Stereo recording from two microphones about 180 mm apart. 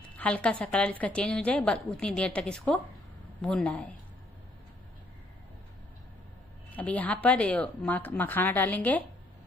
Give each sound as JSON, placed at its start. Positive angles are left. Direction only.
{"t": 0.1, "sound": "a woman's voice", "side_deg": 5}
{"t": 6.7, "sound": "speech", "side_deg": 10}